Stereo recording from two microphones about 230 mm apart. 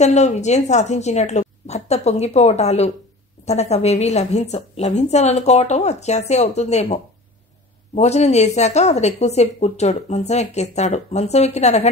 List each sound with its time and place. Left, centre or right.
0.0 s a woman's voice: left